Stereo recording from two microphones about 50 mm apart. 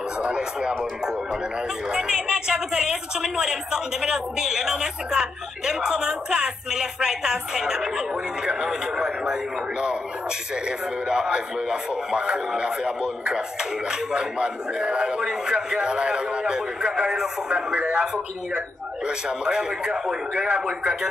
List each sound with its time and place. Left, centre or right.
0.2 s a woman's voice: centre
1.9 s a woman's voice: centre
11.1 s a woman's voice: centre